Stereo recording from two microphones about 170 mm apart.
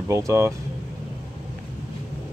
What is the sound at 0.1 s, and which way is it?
Speech, 15° right (ahead or behind).